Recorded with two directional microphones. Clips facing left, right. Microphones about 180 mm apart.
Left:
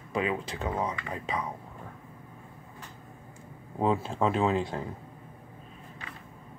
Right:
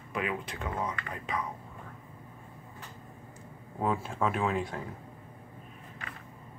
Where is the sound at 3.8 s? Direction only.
25° left (ahead or behind).